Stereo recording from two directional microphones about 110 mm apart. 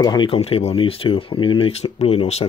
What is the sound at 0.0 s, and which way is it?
Speech, 40° left (ahead or behind).